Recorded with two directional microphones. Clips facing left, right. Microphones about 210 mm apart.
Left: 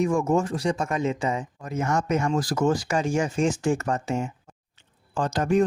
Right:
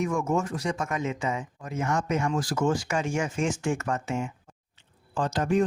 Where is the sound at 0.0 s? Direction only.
30° left (ahead or behind).